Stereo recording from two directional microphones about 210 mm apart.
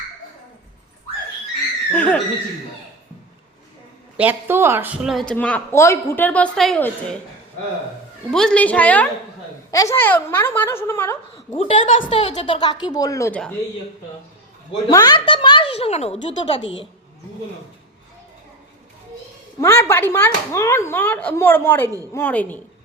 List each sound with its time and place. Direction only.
1.9 s speech: 5° left (ahead or behind)
4.2 s speech: 10° right (ahead or behind)
8.3 s speech: 5° left (ahead or behind)
11.5 s a woman's voice: 25° left (ahead or behind); by 13.6 s 5° left (ahead or behind)
14.8 s a woman's voice: 15° left (ahead or behind)
19.5 s speech: 15° left (ahead or behind)